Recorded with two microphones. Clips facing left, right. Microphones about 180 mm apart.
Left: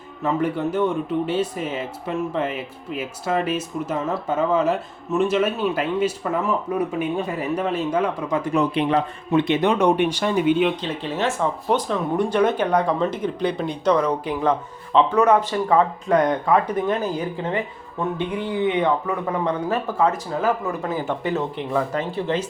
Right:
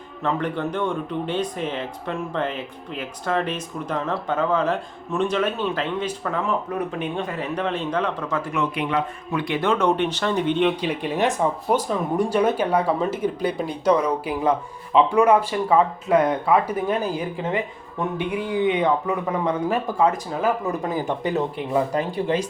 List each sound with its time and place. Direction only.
0.2 s speech: 5° left (ahead or behind)
8.5 s speech: 35° left (ahead or behind); by 10.8 s 5° left (ahead or behind)
10.8 s speech: 10° right (ahead or behind)